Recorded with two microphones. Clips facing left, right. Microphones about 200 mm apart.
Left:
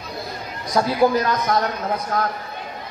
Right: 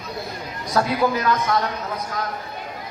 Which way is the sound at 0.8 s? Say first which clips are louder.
Left 1 dB; 20° left (ahead or behind).